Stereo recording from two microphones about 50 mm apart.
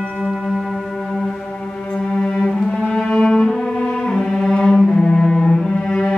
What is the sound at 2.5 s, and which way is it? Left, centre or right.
Cello, centre.